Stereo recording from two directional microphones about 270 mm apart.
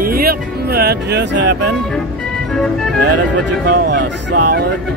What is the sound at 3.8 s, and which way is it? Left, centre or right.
Speech, right.